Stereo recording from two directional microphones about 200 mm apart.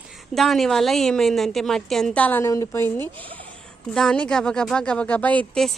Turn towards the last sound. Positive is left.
turn(degrees=5)  # may be behind; listen again after turning